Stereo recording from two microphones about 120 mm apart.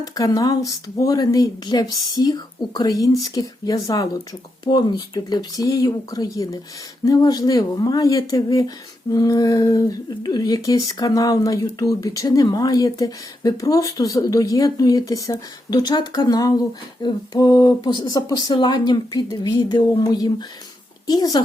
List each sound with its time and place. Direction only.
0.0 s speech: 30° left (ahead or behind)